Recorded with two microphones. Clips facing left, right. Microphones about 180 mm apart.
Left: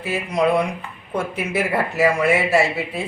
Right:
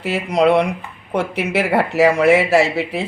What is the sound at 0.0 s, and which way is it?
Speech, 70° right (ahead or behind).